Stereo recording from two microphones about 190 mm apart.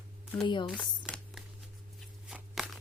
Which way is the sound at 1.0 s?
Centre (ahead or behind).